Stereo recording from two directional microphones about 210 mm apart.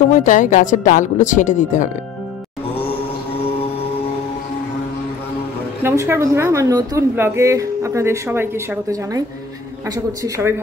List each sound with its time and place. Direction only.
0.1 s a woman's voice: 35° left (ahead or behind)
5.8 s a woman's voice: 10° right (ahead or behind)
9.8 s a woman's voice: 15° right (ahead or behind)